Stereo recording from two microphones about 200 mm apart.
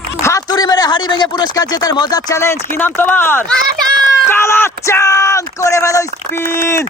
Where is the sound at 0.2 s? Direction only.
15° left (ahead or behind).